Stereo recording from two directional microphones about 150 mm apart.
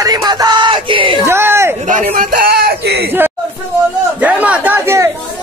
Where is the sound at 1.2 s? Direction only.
15° right (ahead or behind).